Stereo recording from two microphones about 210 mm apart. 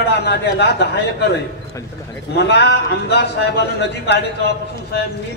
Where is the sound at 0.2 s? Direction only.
50° left (ahead or behind).